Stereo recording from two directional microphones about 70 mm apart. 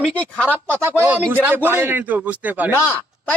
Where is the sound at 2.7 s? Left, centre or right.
Left.